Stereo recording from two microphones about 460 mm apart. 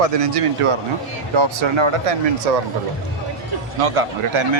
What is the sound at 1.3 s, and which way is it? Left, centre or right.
Speech, right.